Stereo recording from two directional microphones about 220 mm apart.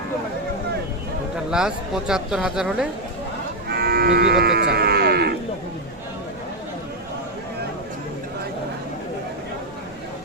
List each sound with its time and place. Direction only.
1.5 s speech: 5° right (ahead or behind)
3.7 s livestock: 45° right (ahead or behind)